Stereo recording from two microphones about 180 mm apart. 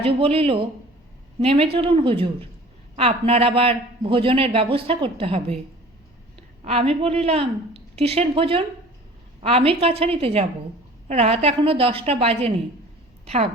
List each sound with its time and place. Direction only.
0.0 s a man's voice: 30° right (ahead or behind)
6.6 s a man's voice: 30° right (ahead or behind)